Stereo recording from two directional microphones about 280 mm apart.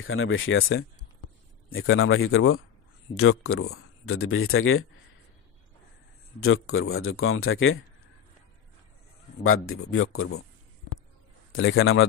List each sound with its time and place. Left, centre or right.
0.0 s speech: left
6.4 s speech: left
9.4 s speech: left
11.5 s speech: left